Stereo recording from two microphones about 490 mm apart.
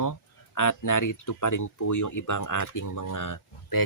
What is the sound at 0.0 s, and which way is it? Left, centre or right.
Speech, left.